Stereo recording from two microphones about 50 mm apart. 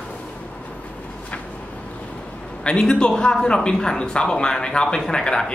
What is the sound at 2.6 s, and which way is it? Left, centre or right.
A man's voice, centre.